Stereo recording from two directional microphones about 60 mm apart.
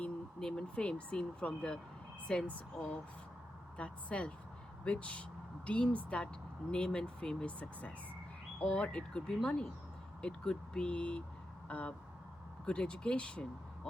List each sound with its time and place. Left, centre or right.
0.3 s speech: centre